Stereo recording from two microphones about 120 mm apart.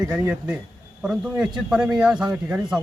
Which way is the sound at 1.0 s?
5° right (ahead or behind).